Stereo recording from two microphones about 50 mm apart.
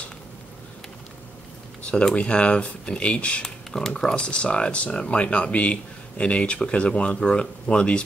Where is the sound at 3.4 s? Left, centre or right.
Centre.